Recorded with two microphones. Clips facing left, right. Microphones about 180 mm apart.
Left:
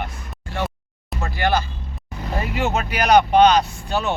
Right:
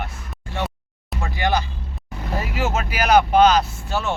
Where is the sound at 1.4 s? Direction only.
15° right (ahead or behind).